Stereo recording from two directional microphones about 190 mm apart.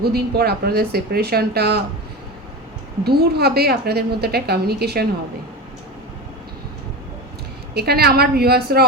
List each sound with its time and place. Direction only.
0.0 s a woman's voice: 55° right (ahead or behind)
3.0 s a woman's voice: 55° right (ahead or behind)
7.7 s a woman's voice: 55° right (ahead or behind)